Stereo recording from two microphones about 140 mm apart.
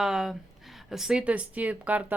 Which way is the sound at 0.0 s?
5° right (ahead or behind).